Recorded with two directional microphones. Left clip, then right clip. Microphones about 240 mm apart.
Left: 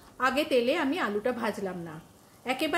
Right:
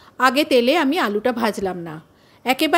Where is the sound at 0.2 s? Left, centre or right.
Right.